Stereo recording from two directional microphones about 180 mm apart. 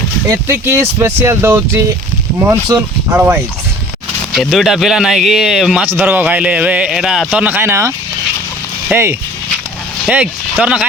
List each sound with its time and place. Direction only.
0.3 s speech: 15° right (ahead or behind)
4.4 s a man's voice: centre (ahead or behind)
10.6 s a man's voice: 5° right (ahead or behind)